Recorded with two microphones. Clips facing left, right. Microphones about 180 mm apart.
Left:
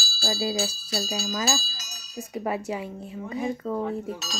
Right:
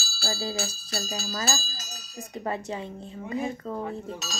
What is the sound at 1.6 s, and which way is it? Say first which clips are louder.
Speech: right 2 dB; 50° right (ahead or behind).